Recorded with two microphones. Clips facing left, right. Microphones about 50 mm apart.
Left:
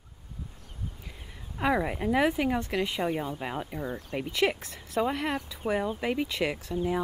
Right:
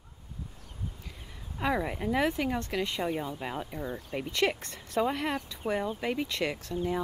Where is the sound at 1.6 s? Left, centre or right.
Centre.